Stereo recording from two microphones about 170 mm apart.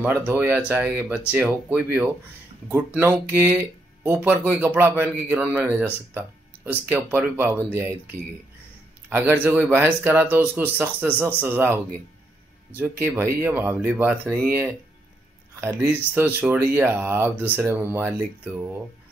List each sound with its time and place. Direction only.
0.0 s speech: 10° right (ahead or behind)